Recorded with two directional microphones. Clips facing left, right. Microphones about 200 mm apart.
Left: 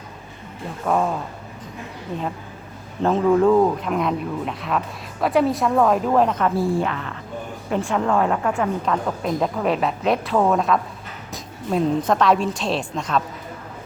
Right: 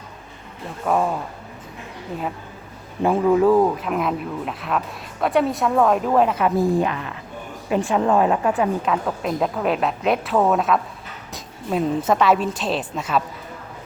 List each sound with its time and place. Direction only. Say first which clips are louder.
0.9 s a woman's voice: even; 5° right (ahead or behind)
3.0 s a woman's voice: even; 10° right (ahead or behind)
6.6 s a woman's voice: right 2 dB; 15° right (ahead or behind)
8.8 s a woman's voice: even; 5° right (ahead or behind)